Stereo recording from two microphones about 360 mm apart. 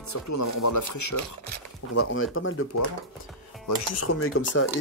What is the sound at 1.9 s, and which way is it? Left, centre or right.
Speech, left.